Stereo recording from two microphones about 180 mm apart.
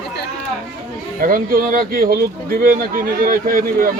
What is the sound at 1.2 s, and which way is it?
Speech, 50° right (ahead or behind).